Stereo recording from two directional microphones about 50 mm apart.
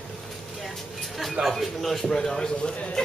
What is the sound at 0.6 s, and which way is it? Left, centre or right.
A man's voice, centre.